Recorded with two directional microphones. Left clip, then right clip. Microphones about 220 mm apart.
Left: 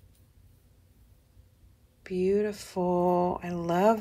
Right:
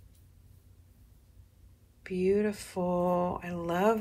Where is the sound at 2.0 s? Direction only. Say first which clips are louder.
Left 1 dB; 15° left (ahead or behind).